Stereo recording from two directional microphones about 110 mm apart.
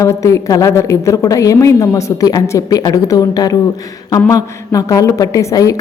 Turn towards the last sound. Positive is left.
turn(degrees=30)  # may be behind; listen again after turning